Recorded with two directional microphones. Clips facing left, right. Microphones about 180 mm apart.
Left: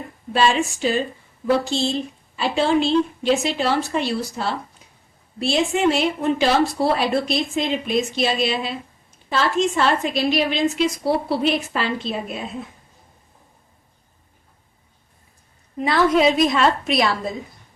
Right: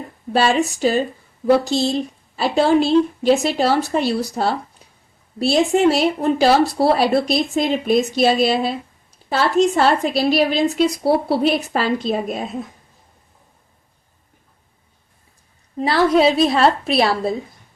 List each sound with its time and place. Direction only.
0.3 s speech: 40° right (ahead or behind)
15.8 s speech: 35° right (ahead or behind)